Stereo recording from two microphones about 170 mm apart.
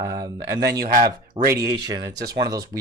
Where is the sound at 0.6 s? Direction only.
70° right (ahead or behind).